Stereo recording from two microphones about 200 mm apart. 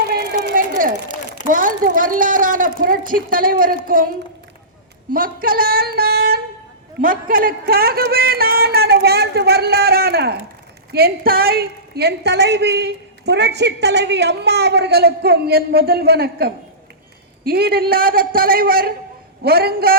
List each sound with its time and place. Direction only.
0.1 s a sound: 50° right (ahead or behind)
1.5 s speech: 40° right (ahead or behind)
5.1 s a woman's voice: 45° right (ahead or behind)